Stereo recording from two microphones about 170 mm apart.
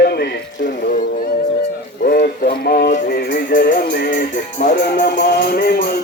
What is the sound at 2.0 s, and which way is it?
Music, 60° left (ahead or behind).